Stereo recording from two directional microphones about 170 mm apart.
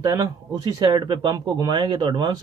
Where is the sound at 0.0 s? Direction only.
20° right (ahead or behind).